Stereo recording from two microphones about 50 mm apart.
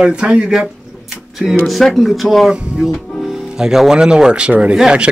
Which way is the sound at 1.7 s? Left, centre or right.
Centre.